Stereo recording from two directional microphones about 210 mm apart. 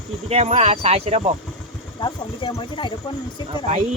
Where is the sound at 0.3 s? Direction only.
30° right (ahead or behind).